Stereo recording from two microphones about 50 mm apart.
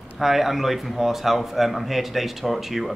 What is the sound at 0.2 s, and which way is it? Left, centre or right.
A man's voice, centre.